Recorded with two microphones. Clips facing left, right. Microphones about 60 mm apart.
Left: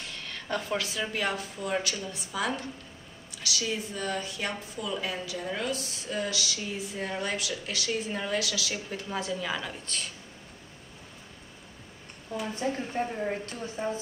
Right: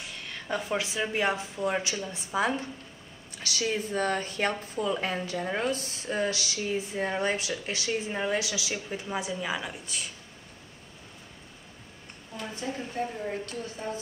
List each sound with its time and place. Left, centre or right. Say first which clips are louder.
0.0 s speech: even; centre; by 2.7 s right
3.4 s a woman's voice: right 2 dB; right; by 10.0 s centre
12.5 s a woman's voice: left 1 dB; left